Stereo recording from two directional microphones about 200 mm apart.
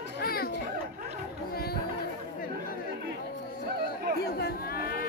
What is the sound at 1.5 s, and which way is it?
Chatter, 50° left (ahead or behind).